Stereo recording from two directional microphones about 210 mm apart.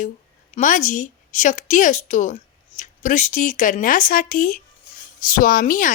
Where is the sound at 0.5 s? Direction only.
35° left (ahead or behind).